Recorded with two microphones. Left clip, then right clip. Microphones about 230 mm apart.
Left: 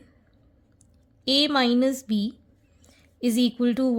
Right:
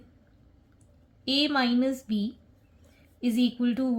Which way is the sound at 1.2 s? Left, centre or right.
Left.